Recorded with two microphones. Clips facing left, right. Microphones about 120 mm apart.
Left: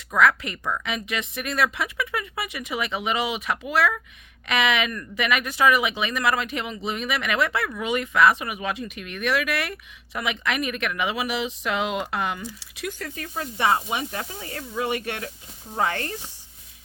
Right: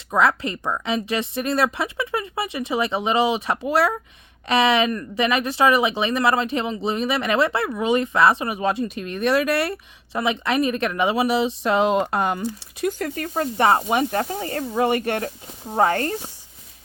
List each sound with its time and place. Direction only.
0.1 s speech: 30° right (ahead or behind)